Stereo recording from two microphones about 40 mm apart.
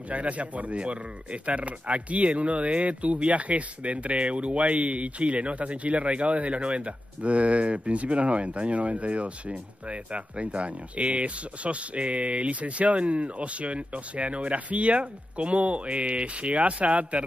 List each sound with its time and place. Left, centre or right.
0.1 s speech: right